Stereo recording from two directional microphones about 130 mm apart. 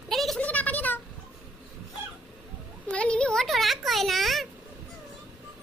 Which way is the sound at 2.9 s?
10° left (ahead or behind).